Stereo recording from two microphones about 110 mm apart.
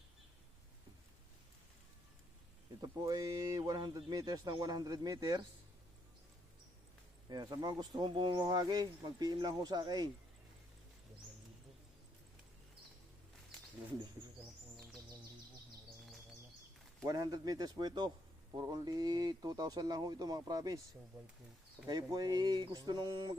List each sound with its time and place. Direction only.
2.8 s speech: 35° right (ahead or behind)
7.3 s speech: 40° right (ahead or behind)
17.1 s speech: 35° right (ahead or behind)
21.8 s speech: 35° right (ahead or behind)